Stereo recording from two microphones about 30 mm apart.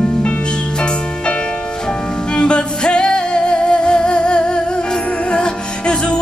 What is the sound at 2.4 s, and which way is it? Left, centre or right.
Music, left.